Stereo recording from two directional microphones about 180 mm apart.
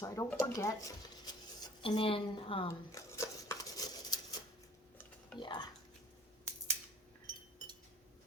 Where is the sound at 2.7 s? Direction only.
15° left (ahead or behind).